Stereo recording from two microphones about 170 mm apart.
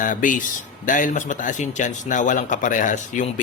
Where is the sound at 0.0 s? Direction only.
50° left (ahead or behind).